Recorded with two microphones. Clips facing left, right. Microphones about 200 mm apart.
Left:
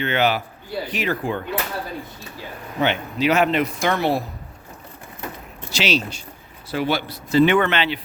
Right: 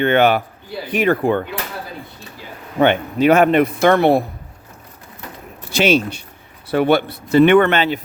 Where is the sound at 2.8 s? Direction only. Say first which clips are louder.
Right 7 dB; 55° right (ahead or behind).